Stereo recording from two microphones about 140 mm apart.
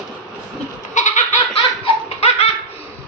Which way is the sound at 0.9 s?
60° left (ahead or behind).